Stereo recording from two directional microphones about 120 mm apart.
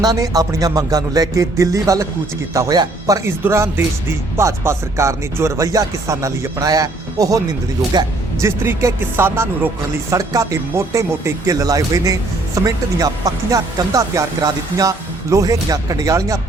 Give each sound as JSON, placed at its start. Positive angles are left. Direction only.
{"t": 0.0, "sound": "speech", "side_deg": -30}
{"t": 3.4, "sound": "speech", "side_deg": -20}